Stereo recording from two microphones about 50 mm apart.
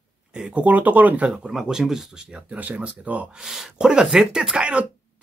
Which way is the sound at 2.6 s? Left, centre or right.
Right.